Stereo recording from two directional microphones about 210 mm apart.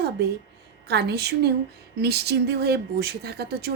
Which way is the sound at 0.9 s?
50° right (ahead or behind).